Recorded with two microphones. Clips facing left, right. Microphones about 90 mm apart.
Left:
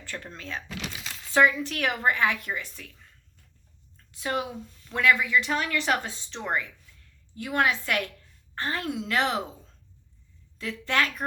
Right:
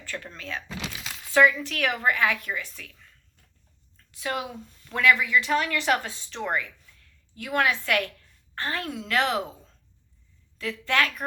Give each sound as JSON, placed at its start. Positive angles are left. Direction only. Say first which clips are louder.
{"t": 0.1, "sound": "speech", "louder": "right 1 dB", "side_deg": 25}
{"t": 4.2, "sound": "speech", "louder": "left 1 dB", "side_deg": 30}
{"t": 10.6, "sound": "speech", "louder": "right 1 dB", "side_deg": 25}